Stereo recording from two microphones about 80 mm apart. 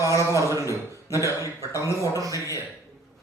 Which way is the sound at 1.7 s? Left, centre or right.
Left.